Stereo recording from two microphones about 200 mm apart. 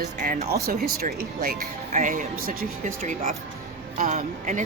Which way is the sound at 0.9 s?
50° right (ahead or behind).